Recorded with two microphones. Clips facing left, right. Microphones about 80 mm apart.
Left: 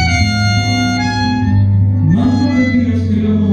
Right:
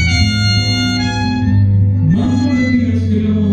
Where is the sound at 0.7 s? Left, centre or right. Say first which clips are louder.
Left 2 dB; centre.